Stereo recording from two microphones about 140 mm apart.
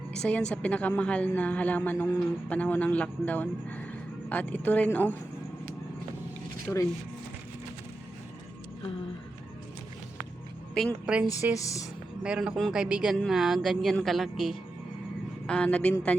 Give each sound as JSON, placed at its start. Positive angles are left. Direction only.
{"t": 0.2, "sound": "a man's voice", "side_deg": 10}
{"t": 6.7, "sound": "a man's voice", "side_deg": 15}
{"t": 11.0, "sound": "speech", "side_deg": -5}
{"t": 11.5, "sound": "speech", "side_deg": 25}
{"t": 12.2, "sound": "a woman's voice", "side_deg": -5}